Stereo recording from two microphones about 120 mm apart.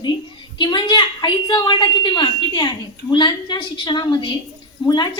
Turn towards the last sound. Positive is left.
turn(degrees=40)  # may be behind; listen again after turning